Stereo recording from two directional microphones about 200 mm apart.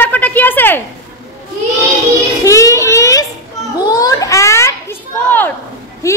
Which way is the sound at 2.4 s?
15° left (ahead or behind).